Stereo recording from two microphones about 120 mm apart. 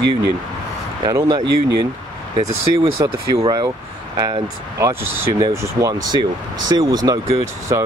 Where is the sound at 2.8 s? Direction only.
55° right (ahead or behind).